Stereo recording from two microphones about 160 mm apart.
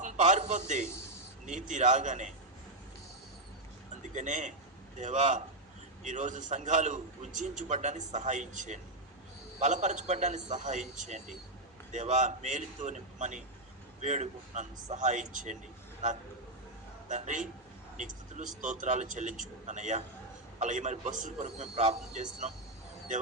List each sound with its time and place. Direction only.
0.0 s a sound: 45° right (ahead or behind)
0.9 s a sound: 15° left (ahead or behind)
1.5 s a man's voice: 50° right (ahead or behind)
4.0 s a man's voice: 50° right (ahead or behind)
17.1 s a man's voice: 50° right (ahead or behind)
21.4 s a man's voice: 40° right (ahead or behind)